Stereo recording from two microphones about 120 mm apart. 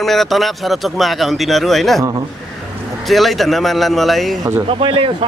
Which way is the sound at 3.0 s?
Centre (ahead or behind).